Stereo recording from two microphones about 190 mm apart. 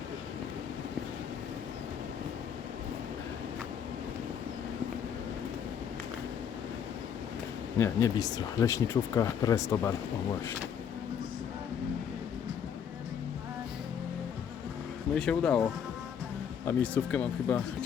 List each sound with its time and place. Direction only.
7.8 s speech: 15° left (ahead or behind)
15.1 s speech: 5° left (ahead or behind)
16.6 s speech: 5° left (ahead or behind)